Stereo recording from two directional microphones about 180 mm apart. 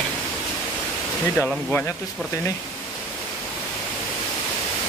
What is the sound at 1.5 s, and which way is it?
Speech, 10° left (ahead or behind).